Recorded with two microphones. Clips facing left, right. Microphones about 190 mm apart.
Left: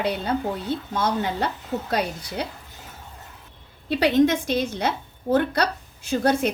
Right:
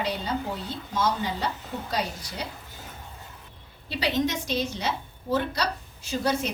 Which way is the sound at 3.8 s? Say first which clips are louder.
Left 8 dB; 55° left (ahead or behind).